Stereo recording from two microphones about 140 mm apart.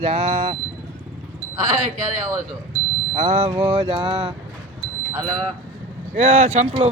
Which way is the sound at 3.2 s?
60° right (ahead or behind).